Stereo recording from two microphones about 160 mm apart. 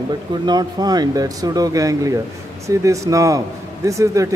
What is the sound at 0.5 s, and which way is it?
Speech, 25° right (ahead or behind).